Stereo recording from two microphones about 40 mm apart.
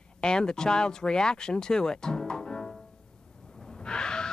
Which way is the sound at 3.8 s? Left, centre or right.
Left.